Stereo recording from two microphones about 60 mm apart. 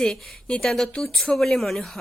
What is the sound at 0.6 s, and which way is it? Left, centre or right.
A woman's voice, centre.